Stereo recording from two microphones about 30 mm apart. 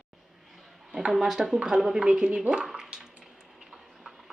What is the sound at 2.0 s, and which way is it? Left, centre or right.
Speech, right.